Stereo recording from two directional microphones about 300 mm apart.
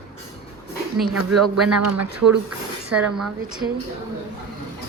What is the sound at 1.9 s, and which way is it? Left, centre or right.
Speech, right.